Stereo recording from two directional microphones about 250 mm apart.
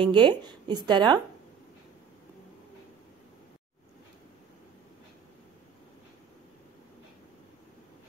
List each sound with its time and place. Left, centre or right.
0.0 s speech: centre